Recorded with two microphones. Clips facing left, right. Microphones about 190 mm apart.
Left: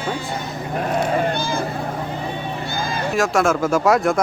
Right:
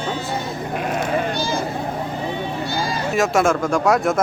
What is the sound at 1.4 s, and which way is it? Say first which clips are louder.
Vehicle: right 1 dB; 55° left (ahead or behind).